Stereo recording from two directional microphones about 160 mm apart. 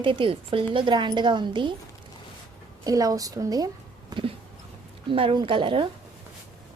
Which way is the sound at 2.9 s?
20° right (ahead or behind).